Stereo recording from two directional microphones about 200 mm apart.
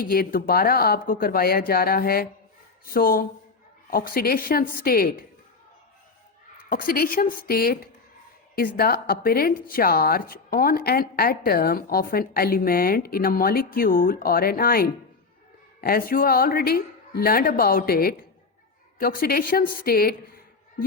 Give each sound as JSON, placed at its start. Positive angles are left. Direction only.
{"t": 0.0, "sound": "a woman's voice", "side_deg": 45}
{"t": 6.7, "sound": "a woman's voice", "side_deg": 45}